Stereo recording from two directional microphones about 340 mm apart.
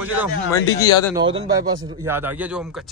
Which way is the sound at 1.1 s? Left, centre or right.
Centre.